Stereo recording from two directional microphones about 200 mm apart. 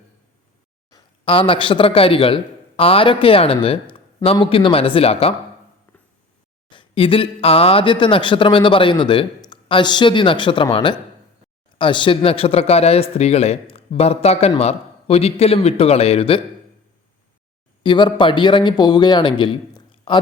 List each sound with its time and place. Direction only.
0.9 s a man's voice: 20° left (ahead or behind)
6.7 s a man's voice: 25° left (ahead or behind)
17.8 s speech: 25° left (ahead or behind)